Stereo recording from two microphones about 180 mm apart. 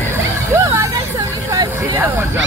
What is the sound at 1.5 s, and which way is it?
Vehicle, 20° right (ahead or behind).